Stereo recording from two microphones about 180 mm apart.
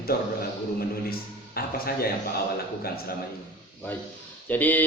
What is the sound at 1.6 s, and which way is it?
Speech, 55° left (ahead or behind).